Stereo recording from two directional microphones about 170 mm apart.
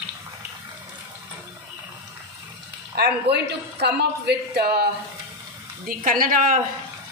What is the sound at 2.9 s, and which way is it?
Speech, 75° right (ahead or behind).